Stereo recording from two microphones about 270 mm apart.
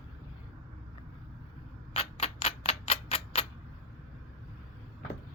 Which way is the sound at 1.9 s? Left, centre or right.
Left.